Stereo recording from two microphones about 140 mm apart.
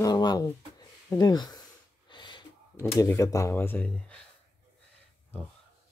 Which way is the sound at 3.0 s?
20° left (ahead or behind).